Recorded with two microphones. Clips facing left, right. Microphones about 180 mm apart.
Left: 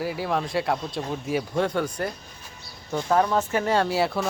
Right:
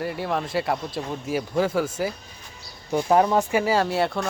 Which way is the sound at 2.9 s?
15° right (ahead or behind).